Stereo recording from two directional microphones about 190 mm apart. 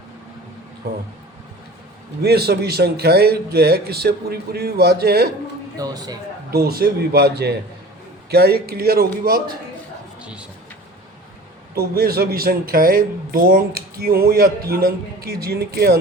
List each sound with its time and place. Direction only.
0.8 s speech: 60° right (ahead or behind)
2.2 s speech: 55° right (ahead or behind)
5.7 s a man's voice: 20° right (ahead or behind)
6.5 s speech: 55° right (ahead or behind)
11.7 s speech: 55° right (ahead or behind)